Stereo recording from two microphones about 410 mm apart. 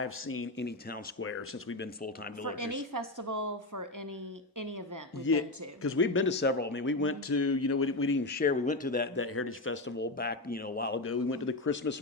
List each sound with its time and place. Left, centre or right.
0.0 s speech: left
2.6 s a woman's voice: right
5.3 s speech: left